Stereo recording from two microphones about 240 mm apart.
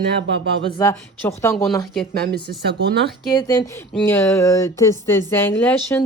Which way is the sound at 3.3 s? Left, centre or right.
Centre.